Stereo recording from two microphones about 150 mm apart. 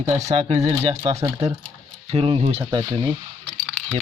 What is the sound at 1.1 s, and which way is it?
Speech, 25° right (ahead or behind).